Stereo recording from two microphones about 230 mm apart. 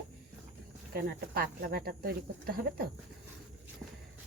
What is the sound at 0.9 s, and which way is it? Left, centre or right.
Speech, right.